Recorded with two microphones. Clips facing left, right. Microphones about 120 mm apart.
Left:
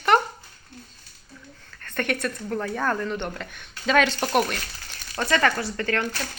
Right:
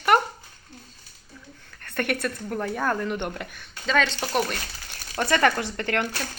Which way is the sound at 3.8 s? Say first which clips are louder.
Left 3 dB; 10° left (ahead or behind).